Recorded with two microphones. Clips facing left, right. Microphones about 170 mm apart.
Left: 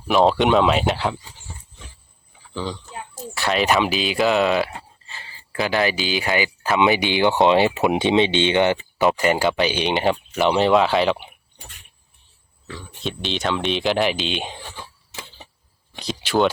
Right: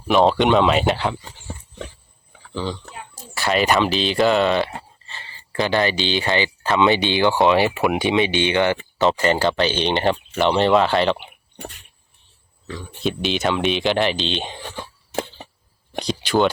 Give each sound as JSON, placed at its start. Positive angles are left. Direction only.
{"t": 0.1, "sound": "speech", "side_deg": 0}
{"t": 3.3, "sound": "speech", "side_deg": 0}
{"t": 13.1, "sound": "speech", "side_deg": -5}
{"t": 15.1, "sound": "a sound", "side_deg": -55}
{"t": 16.0, "sound": "speech", "side_deg": 0}